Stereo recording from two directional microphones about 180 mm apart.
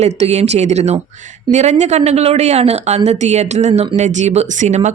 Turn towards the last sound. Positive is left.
turn(degrees=-40)  # may be behind; listen again after turning